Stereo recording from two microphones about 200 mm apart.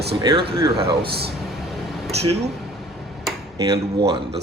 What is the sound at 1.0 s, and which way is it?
Speech, 55° right (ahead or behind).